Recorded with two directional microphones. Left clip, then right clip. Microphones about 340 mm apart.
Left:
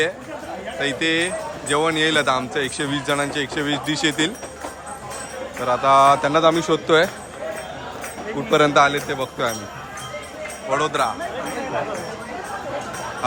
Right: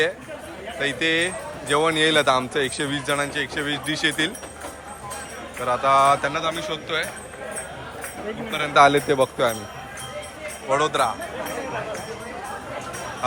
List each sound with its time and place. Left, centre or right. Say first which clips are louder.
0.8 s speech: left 1 dB; centre
5.6 s speech: left 3 dB; centre
8.4 s a man's voice: left 11 dB; centre
8.7 s a man's voice: right 1 dB; centre
10.7 s a man's voice: even; centre